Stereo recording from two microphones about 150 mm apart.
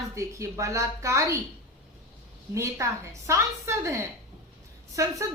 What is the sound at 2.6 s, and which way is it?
A woman's voice, 20° right (ahead or behind).